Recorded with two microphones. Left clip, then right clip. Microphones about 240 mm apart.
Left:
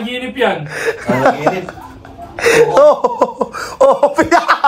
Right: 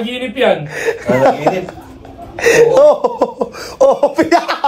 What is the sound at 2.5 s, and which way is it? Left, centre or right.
Laughter, left.